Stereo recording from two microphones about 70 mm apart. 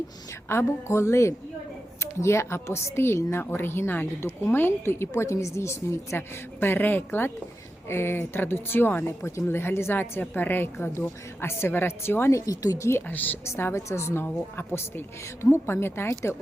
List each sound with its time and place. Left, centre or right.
0.4 s speech: left
12.5 s speech: left
13.1 s a woman's voice: left
13.4 s speech: left